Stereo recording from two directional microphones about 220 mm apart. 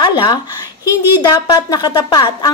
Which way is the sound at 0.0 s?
20° left (ahead or behind).